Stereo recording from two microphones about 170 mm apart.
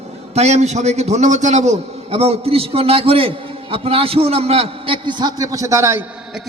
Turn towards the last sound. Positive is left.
turn(degrees=-15)  # may be behind; listen again after turning